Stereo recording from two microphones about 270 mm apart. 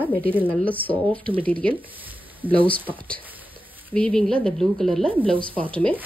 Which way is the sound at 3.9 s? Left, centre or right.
Centre.